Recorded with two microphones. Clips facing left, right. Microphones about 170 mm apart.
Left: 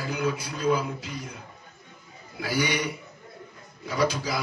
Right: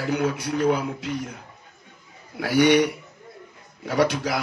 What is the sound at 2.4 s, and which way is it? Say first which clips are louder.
A man's voice: right 9 dB; 70° right (ahead or behind).